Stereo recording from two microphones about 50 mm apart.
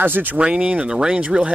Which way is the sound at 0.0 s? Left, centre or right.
Right.